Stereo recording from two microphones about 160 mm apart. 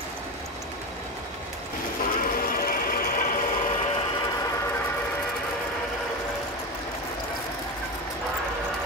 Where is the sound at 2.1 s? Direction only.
65° left (ahead or behind).